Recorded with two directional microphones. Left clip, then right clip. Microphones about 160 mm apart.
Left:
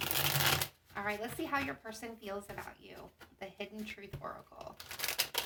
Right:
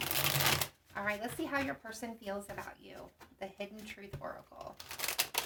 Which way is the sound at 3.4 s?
40° right (ahead or behind).